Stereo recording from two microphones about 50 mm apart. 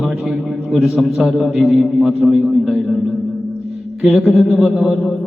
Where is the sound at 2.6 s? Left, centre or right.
Centre.